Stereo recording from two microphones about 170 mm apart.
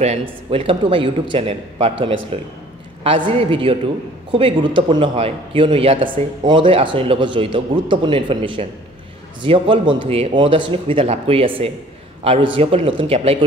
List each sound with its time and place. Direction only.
0.0 s a man's voice: 35° right (ahead or behind)